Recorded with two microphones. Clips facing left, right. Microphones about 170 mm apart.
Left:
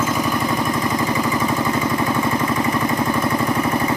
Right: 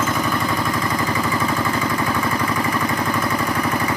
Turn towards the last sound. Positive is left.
turn(degrees=25)  # may be behind; listen again after turning